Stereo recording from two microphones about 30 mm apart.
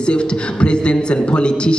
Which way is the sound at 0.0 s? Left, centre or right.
Left.